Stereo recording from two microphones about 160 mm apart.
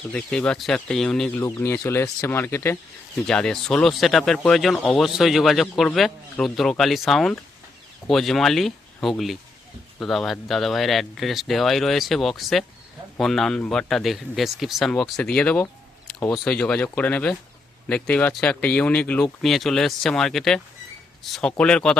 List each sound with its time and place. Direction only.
0.1 s speech: 5° left (ahead or behind)
1.4 s speech: 15° left (ahead or behind)
3.2 s speech: 5° left (ahead or behind)